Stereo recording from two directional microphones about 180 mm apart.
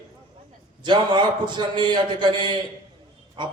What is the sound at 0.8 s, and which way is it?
A man's voice, 25° right (ahead or behind).